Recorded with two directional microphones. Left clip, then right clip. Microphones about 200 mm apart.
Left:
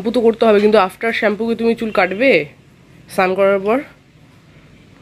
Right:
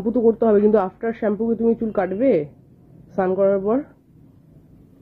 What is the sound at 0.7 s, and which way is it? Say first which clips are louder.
Speech: left 6 dB; 10° left (ahead or behind).